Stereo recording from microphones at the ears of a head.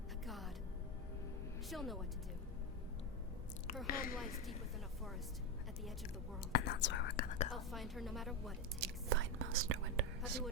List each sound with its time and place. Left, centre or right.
1.7 s a woman's voice: centre
3.8 s speech: left
6.5 s speech: left
7.7 s a woman's voice: centre
8.8 s speech: right